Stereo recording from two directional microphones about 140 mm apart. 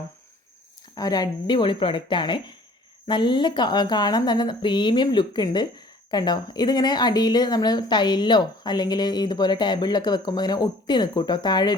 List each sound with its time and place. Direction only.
0.9 s speech: 25° left (ahead or behind)